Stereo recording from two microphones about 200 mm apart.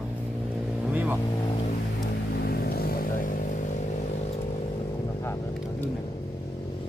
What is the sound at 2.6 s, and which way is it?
Vehicle, 50° left (ahead or behind).